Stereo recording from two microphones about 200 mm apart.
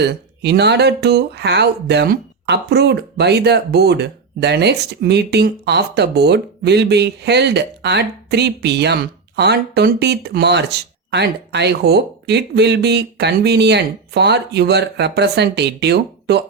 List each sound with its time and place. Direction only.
0.0 s speech: 55° right (ahead or behind)